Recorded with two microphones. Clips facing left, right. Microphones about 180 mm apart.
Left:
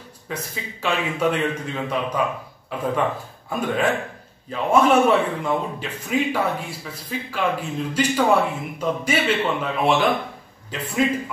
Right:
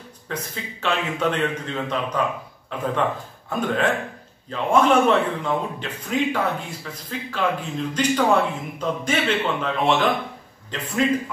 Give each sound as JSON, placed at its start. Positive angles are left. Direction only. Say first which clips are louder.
{"t": 0.3, "sound": "a man's voice", "louder": "even", "side_deg": 10}